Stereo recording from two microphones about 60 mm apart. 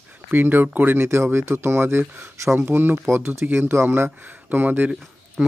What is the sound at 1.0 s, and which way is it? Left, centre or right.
Speech, right.